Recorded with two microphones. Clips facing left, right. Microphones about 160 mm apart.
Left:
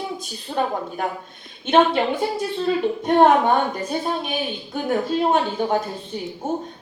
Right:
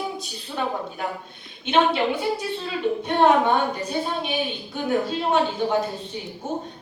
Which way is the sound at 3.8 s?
50° left (ahead or behind).